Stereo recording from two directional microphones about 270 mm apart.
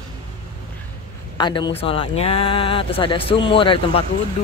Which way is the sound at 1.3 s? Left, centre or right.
Centre.